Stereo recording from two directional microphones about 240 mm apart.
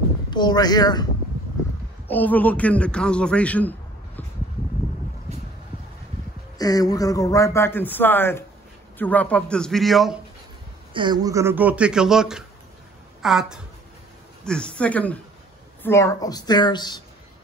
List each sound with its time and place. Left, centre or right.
0.3 s speech: centre
2.0 s a man's voice: centre
6.6 s a man's voice: centre
10.9 s a man's voice: centre